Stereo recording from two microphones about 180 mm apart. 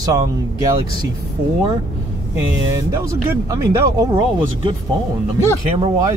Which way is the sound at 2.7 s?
15° right (ahead or behind).